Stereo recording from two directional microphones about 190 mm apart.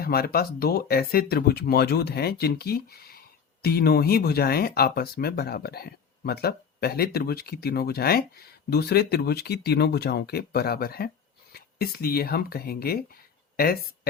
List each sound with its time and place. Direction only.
0.0 s speech: 50° left (ahead or behind)